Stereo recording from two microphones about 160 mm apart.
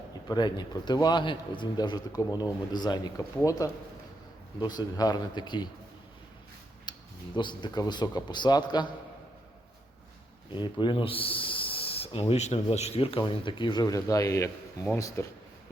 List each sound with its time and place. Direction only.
0.3 s a man's voice: 25° left (ahead or behind)
6.9 s a sound: 30° left (ahead or behind)
7.3 s a man's voice: 30° left (ahead or behind)
10.5 s a man's voice: 30° left (ahead or behind)